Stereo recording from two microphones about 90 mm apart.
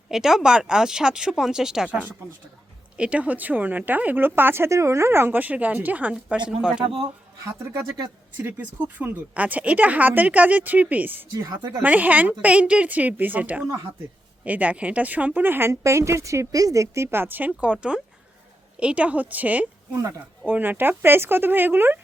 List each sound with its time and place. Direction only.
0.1 s speech: 5° right (ahead or behind)
6.8 s a man's voice: 70° right (ahead or behind)
7.4 s speech: 30° right (ahead or behind)
11.4 s a woman's voice: 45° right (ahead or behind)
11.8 s speech: 20° right (ahead or behind)
19.9 s speech: 35° right (ahead or behind)
20.5 s speech: 20° right (ahead or behind)